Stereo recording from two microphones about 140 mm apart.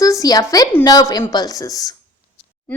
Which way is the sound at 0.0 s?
25° left (ahead or behind).